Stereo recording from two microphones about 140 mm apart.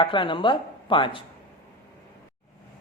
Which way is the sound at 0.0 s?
35° left (ahead or behind).